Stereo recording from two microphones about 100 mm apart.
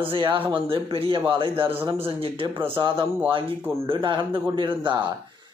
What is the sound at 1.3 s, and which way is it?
Speech, 60° right (ahead or behind).